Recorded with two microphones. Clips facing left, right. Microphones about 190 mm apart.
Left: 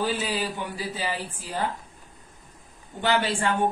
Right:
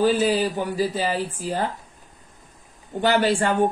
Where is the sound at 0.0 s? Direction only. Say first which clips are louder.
Right 8 dB; 40° right (ahead or behind).